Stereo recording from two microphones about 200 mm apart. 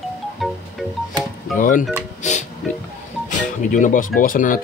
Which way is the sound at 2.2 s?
35° left (ahead or behind).